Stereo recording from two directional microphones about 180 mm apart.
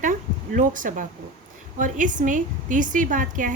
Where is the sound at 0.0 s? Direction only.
45° right (ahead or behind).